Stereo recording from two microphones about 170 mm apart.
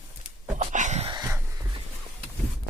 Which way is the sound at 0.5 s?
45° right (ahead or behind).